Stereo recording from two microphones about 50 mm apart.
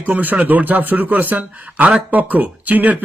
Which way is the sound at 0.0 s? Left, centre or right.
Right.